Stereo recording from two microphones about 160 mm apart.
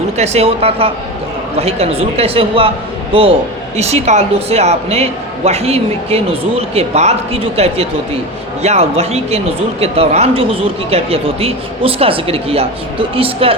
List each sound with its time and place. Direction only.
0.2 s speech: 40° right (ahead or behind)